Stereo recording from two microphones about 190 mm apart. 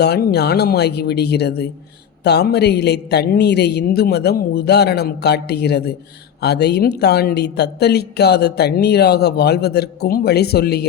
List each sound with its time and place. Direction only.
0.0 s speech: 60° left (ahead or behind)